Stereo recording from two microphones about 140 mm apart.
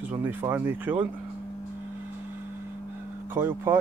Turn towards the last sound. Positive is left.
turn(degrees=-15)  # may be behind; listen again after turning